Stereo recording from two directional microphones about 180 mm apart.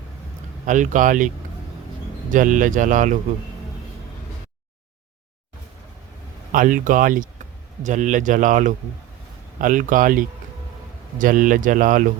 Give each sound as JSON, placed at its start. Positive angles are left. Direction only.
{"t": 0.6, "sound": "speech", "side_deg": -45}
{"t": 2.3, "sound": "speech", "side_deg": -45}
{"t": 6.5, "sound": "speech", "side_deg": -45}